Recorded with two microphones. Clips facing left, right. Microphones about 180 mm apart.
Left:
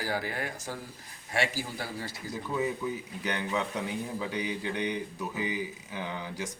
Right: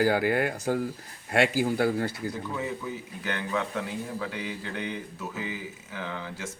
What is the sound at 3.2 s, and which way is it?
A man's voice, 20° left (ahead or behind).